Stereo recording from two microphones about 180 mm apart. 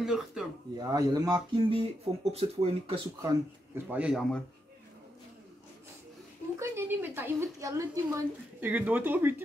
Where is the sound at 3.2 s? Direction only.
15° right (ahead or behind).